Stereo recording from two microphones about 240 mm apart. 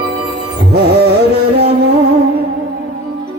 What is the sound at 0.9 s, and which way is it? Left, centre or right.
Music, right.